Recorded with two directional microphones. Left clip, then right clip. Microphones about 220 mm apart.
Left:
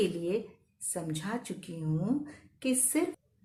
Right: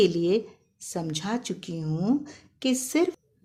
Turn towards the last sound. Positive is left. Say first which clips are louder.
# right 6 dB
turn(degrees=-40)  # may be behind; listen again after turning